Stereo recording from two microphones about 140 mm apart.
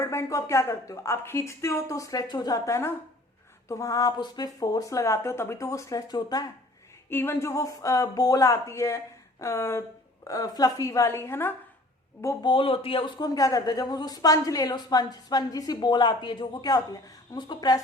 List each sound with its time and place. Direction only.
0.0 s a woman's voice: 20° left (ahead or behind)
7.1 s a woman's voice: 15° left (ahead or behind)
12.5 s speech: 40° left (ahead or behind)
13.1 s a woman's voice: 25° left (ahead or behind)